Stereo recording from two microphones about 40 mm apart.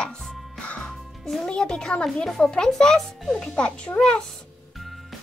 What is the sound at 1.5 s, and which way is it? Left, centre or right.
A child's voice, centre.